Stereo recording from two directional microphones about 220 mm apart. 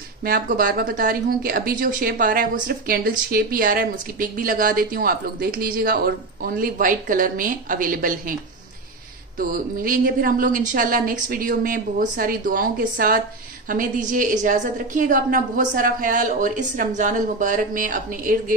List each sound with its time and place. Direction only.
0.2 s speech: 40° right (ahead or behind)
9.4 s speech: 40° right (ahead or behind)